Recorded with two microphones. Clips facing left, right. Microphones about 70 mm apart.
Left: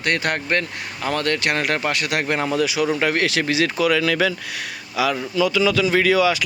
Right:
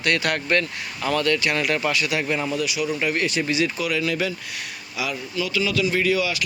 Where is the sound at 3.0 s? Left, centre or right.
Left.